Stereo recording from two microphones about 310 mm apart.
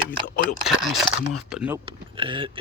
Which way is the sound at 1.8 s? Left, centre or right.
Centre.